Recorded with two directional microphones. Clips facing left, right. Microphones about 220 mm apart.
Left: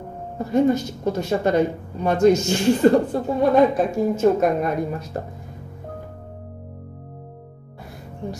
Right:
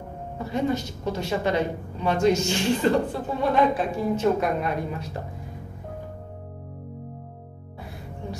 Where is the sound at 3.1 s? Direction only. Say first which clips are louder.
Left 6 dB; 45° left (ahead or behind).